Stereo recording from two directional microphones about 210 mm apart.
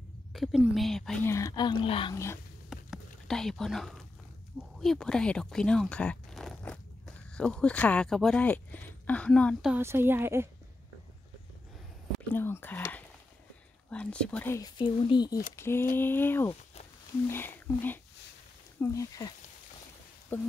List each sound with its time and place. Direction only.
0.3 s speech: centre (ahead or behind)
1.3 s speech: 15° left (ahead or behind)
2.7 s a sound: centre (ahead or behind)
4.7 s speech: centre (ahead or behind)
9.8 s speech: 10° right (ahead or behind)
12.3 s speech: 10° left (ahead or behind)